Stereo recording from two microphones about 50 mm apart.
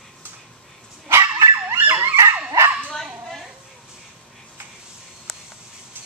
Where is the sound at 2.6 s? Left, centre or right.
Right.